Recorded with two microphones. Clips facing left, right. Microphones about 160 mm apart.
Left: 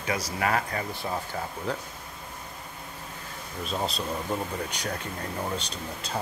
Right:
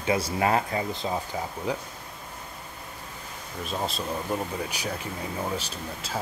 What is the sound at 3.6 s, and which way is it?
Speech, centre (ahead or behind).